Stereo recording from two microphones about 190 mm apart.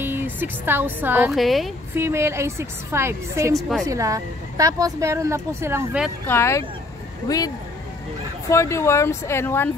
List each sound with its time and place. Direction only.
0.0 s speech: 10° right (ahead or behind)
2.0 s a woman's voice: 15° right (ahead or behind)
3.5 s a woman's voice: centre (ahead or behind)
3.8 s a woman's voice: 15° right (ahead or behind)
6.2 s speech: 15° left (ahead or behind)